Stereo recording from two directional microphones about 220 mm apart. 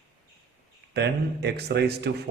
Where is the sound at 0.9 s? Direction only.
50° right (ahead or behind).